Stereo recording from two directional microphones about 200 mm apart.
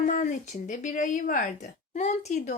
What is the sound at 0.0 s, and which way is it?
Speech, 40° left (ahead or behind).